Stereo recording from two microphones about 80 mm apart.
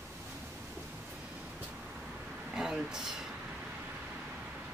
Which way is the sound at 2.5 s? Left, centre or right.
Centre.